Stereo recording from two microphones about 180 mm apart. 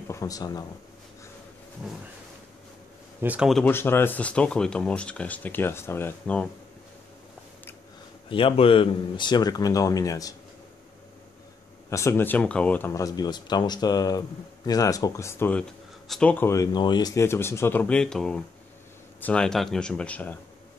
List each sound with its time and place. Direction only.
0.1 s speech: 20° left (ahead or behind)
3.2 s speech: 5° right (ahead or behind)
3.7 s speech: 10° left (ahead or behind)
8.3 s speech: 30° left (ahead or behind)
11.9 s speech: 15° left (ahead or behind)